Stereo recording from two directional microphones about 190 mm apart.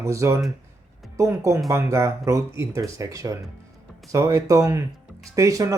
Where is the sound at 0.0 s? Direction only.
15° right (ahead or behind).